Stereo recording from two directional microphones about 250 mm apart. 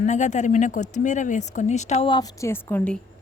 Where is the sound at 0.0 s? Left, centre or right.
Left; by 3.0 s centre.